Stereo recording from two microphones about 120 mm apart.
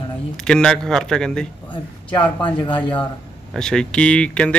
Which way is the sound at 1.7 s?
40° left (ahead or behind).